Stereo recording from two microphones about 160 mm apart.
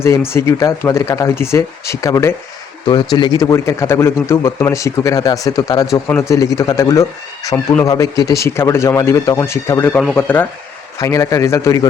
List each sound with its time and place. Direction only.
0.0 s a man's voice: 15° left (ahead or behind)